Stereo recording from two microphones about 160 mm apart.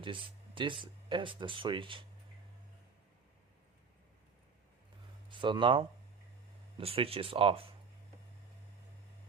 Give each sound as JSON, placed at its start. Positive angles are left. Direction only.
{"t": 0.0, "sound": "speech", "side_deg": -30}
{"t": 5.3, "sound": "speech", "side_deg": -30}